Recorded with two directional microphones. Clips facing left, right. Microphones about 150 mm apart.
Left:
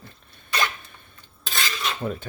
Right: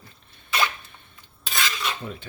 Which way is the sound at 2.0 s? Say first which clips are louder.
Left 7 dB; 45° left (ahead or behind).